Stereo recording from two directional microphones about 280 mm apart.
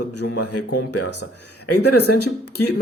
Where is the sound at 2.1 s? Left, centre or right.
Left.